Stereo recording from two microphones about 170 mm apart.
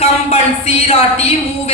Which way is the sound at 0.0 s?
35° left (ahead or behind).